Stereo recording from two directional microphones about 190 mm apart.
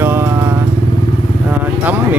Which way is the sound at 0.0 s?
10° right (ahead or behind).